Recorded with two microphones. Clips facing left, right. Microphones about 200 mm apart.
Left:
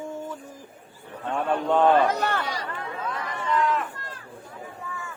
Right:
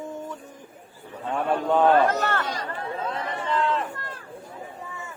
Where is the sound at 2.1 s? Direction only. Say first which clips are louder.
Right 1 dB; 15° left (ahead or behind).